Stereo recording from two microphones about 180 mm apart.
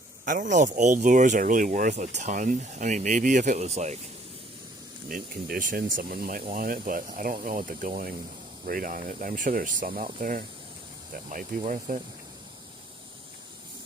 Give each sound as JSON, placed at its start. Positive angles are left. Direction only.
{"t": 0.3, "sound": "speech", "side_deg": -45}
{"t": 5.0, "sound": "speech", "side_deg": -50}